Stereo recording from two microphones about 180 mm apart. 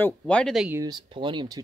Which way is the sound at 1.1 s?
25° right (ahead or behind).